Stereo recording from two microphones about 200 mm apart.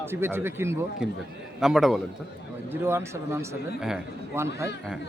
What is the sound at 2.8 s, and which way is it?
Speech, 15° right (ahead or behind).